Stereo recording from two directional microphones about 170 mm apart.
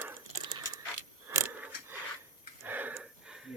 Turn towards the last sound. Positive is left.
turn(degrees=-5)  # may be behind; listen again after turning